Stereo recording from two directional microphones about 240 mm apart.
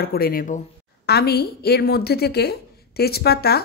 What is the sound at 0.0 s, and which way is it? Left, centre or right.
A woman's voice, left.